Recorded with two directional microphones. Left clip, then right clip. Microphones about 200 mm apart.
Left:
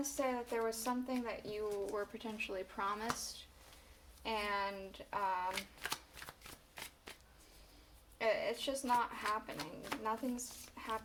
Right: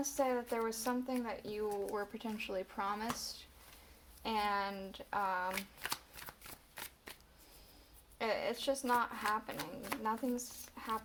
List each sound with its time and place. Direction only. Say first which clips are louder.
0.0 s a woman's voice: right 3 dB; 30° right (ahead or behind)
4.2 s speech: right 2 dB; 35° right (ahead or behind)
8.2 s speech: left 1 dB; 35° right (ahead or behind)
10.8 s a sound: right 2 dB; 25° right (ahead or behind)